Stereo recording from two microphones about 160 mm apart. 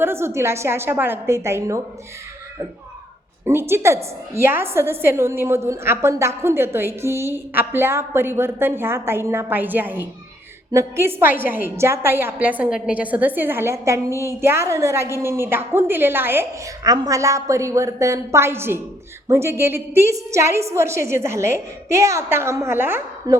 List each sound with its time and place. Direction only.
0.0 s a woman's voice: 15° right (ahead or behind)
3.4 s a woman's voice: 15° right (ahead or behind)